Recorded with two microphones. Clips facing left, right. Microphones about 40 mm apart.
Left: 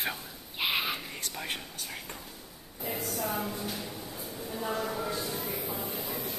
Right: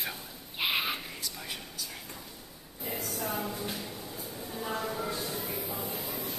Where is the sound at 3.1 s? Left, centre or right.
Centre.